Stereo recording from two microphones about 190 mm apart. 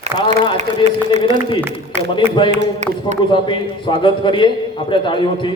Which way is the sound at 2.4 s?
35° right (ahead or behind).